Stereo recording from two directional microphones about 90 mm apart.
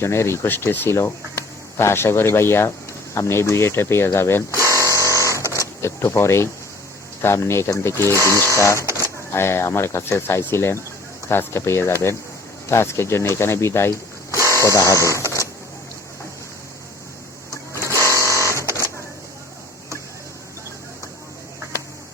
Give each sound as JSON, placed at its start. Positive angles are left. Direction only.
{"t": 0.0, "sound": "speech", "side_deg": 30}
{"t": 4.7, "sound": "printer", "side_deg": 35}
{"t": 5.5, "sound": "speech", "side_deg": 30}
{"t": 17.8, "sound": "sewing machine", "side_deg": 35}